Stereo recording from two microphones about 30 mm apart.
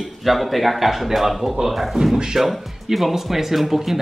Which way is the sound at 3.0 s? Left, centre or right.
Centre.